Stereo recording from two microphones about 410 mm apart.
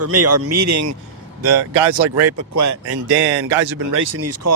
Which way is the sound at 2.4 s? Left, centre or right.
Right.